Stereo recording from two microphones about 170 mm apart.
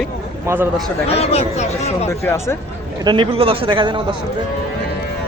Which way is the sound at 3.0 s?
30° right (ahead or behind).